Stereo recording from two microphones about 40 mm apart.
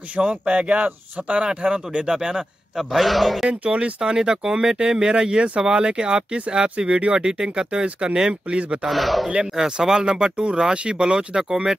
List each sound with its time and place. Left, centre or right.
0.2 s speech: right; by 3.4 s centre
3.7 s speech: right
8.8 s speech: centre
9.7 s speech: centre